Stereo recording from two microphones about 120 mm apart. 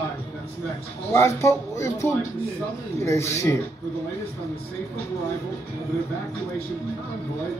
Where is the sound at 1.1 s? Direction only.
20° left (ahead or behind).